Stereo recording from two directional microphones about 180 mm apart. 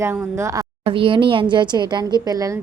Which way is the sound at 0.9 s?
30° right (ahead or behind).